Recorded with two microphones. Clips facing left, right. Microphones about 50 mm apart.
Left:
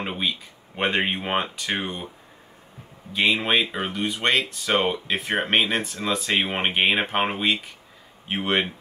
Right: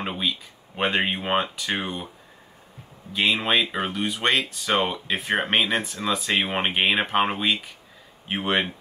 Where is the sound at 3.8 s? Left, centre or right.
Centre.